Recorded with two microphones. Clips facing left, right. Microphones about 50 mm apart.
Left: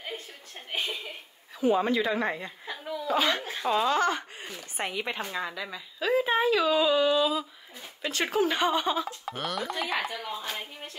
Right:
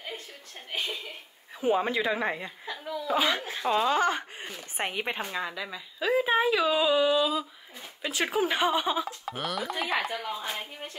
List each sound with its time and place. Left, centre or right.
0.7 s chuckle: left
1.6 s speech: centre
2.6 s chuckle: centre
3.1 s a woman's voice: centre
4.7 s speech: right
5.2 s a woman's voice: centre